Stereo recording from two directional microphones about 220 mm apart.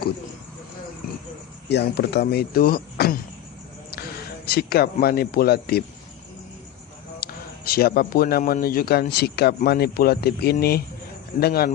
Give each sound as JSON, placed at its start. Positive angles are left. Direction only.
{"t": 1.7, "sound": "a man's voice", "side_deg": 50}
{"t": 4.4, "sound": "a man's voice", "side_deg": 45}
{"t": 7.2, "sound": "a man's voice", "side_deg": 45}